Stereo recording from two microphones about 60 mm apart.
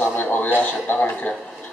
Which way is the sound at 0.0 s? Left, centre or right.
Left.